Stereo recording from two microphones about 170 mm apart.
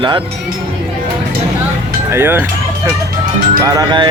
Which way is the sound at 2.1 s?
10° right (ahead or behind).